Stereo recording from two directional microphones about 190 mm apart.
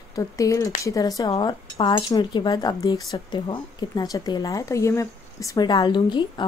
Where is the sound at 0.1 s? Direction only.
15° left (ahead or behind).